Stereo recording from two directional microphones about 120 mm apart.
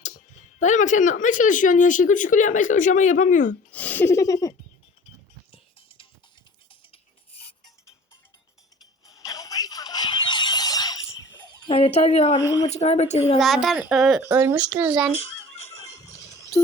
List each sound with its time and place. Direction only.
0.0 s speech: 90° left
3.7 s speech: 15° left (ahead or behind); by 4.5 s 30° left (ahead or behind)
6.7 s music: 50° left (ahead or behind)
9.1 s music: 30° left (ahead or behind)
11.0 s a sound: 35° left (ahead or behind)
11.7 s speech: 60° left (ahead or behind)
12.5 s speech: 25° left (ahead or behind)
12.7 s speech: 65° left (ahead or behind)
13.4 s a woman's voice: centre (ahead or behind)
14.2 s speech: 20° right (ahead or behind)
15.1 s neigh: 55° left (ahead or behind)